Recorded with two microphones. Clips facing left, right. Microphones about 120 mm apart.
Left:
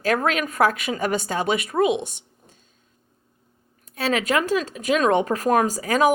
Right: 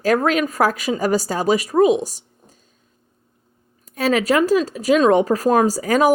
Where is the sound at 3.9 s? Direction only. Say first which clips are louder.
Right 5 dB; 40° right (ahead or behind).